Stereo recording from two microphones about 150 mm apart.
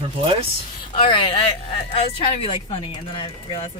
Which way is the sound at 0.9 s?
35° left (ahead or behind).